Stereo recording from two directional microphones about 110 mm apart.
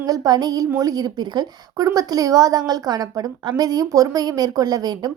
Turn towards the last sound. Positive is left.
turn(degrees=-35)  # may be behind; listen again after turning